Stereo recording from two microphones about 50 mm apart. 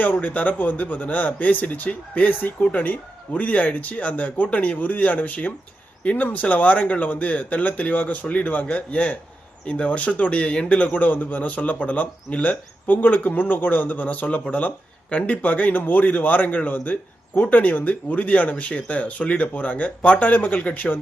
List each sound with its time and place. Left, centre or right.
0.0 s speech: left